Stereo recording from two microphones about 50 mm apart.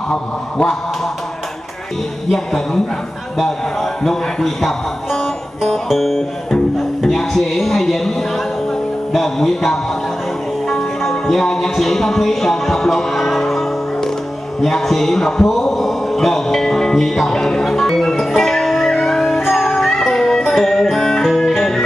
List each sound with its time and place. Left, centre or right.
0.1 s a man's voice: centre
2.3 s speech: centre
9.1 s music: centre
14.6 s a sound: centre
19.5 s music: centre